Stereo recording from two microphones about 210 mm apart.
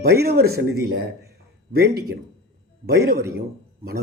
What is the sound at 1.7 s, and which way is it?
Speech, 50° right (ahead or behind).